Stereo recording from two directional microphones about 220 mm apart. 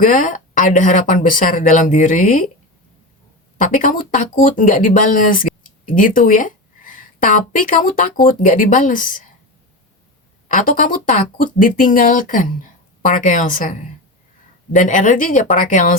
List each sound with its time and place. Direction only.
0.0 s speech: 35° left (ahead or behind)
3.6 s a woman's voice: 35° left (ahead or behind)
10.5 s speech: 35° left (ahead or behind)